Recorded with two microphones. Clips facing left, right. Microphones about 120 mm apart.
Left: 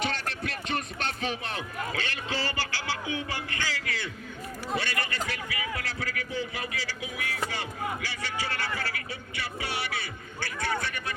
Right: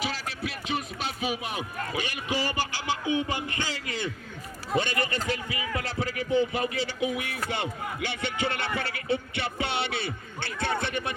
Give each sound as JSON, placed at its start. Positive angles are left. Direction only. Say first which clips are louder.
{"t": 0.0, "sound": "music", "louder": "left 1 dB", "side_deg": -5}
{"t": 4.7, "sound": "speech", "louder": "right 5 dB", "side_deg": -20}